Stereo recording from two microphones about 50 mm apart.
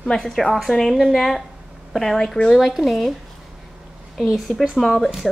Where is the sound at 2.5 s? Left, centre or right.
Centre.